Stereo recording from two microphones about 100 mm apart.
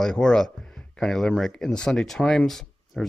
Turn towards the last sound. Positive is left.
turn(degrees=5)  # may be behind; listen again after turning